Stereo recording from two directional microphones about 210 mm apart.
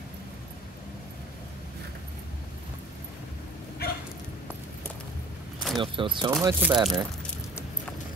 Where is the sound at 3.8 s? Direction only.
50° left (ahead or behind).